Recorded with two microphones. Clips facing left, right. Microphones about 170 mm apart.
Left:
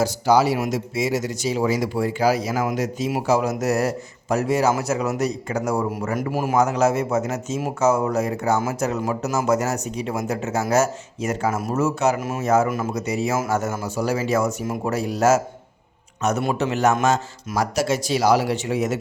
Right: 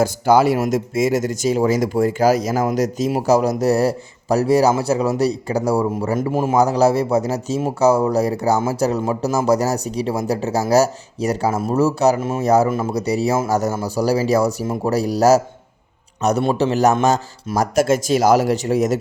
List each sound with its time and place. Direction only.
0.0 s speech: 50° right (ahead or behind)